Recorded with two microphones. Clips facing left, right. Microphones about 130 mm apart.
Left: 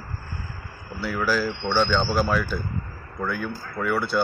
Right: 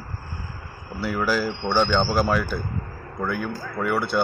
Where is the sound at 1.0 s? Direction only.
10° right (ahead or behind).